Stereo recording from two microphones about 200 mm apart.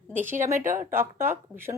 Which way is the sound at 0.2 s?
10° right (ahead or behind).